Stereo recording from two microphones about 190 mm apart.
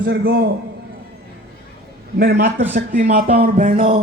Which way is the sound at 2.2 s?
55° right (ahead or behind).